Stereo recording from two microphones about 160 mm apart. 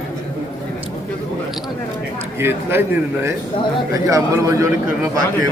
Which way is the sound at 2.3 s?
15° right (ahead or behind).